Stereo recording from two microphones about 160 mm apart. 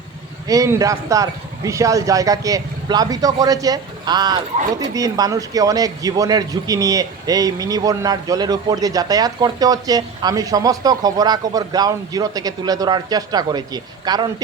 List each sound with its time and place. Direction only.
0.4 s speech: 20° right (ahead or behind)